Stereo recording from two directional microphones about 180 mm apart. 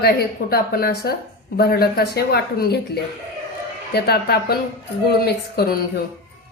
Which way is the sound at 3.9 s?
60° left (ahead or behind).